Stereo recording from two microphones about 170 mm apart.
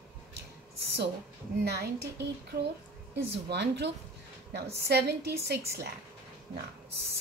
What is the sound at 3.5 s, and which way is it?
Speech, 85° right.